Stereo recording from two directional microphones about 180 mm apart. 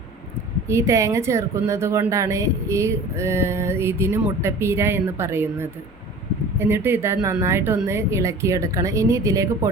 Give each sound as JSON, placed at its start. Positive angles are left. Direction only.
{"t": 0.7, "sound": "speech", "side_deg": -15}